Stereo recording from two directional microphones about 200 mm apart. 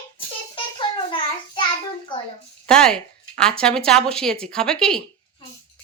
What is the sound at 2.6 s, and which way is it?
Speech, 5° left (ahead or behind).